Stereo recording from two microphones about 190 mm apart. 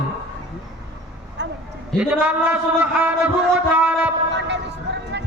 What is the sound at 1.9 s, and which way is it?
A man's voice, 5° right (ahead or behind).